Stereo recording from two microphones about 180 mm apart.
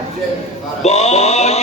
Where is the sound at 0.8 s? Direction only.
40° left (ahead or behind).